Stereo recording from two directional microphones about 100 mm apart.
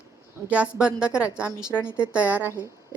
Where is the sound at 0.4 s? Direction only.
15° right (ahead or behind).